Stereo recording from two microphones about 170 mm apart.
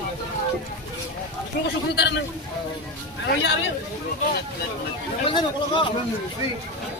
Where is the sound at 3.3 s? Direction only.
90° left.